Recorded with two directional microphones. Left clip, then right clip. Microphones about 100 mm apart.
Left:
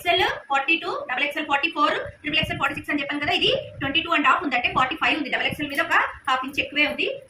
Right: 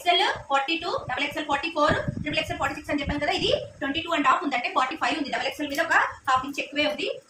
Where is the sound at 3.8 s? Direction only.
15° right (ahead or behind).